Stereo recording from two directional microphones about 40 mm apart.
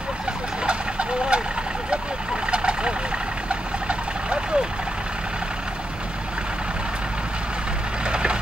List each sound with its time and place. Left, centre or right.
0.7 s vehicle: right
2.5 s vehicle: right
8.1 s splinter: right